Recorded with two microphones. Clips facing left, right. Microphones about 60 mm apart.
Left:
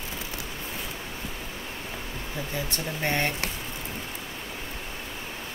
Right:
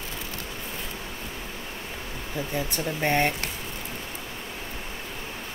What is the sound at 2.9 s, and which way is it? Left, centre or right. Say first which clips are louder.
Speech: right 4 dB; centre.